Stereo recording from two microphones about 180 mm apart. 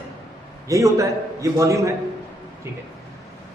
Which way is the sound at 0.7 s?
15° right (ahead or behind).